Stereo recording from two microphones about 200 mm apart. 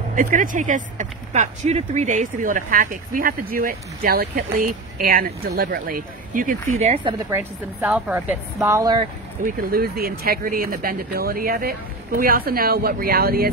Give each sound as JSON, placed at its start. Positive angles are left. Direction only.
{"t": 0.1, "sound": "speech", "side_deg": -40}
{"t": 7.2, "sound": "speech", "side_deg": -10}
{"t": 9.4, "sound": "speech", "side_deg": -45}